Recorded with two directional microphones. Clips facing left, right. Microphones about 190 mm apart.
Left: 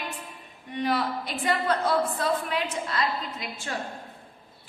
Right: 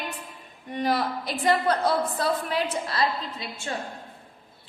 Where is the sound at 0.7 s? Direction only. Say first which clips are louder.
Right 1 dB; 40° right (ahead or behind).